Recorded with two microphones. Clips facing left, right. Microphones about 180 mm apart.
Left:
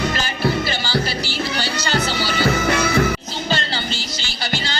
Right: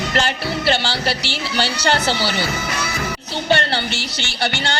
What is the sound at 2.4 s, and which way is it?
Speech, 60° left (ahead or behind).